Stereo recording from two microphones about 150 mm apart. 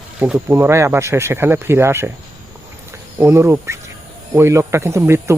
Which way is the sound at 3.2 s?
15° right (ahead or behind).